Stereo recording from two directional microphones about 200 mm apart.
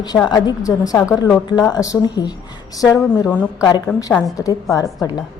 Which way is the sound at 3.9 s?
Centre (ahead or behind).